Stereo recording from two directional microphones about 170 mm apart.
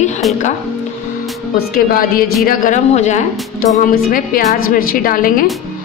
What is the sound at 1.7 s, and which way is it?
A woman's voice, 55° left (ahead or behind).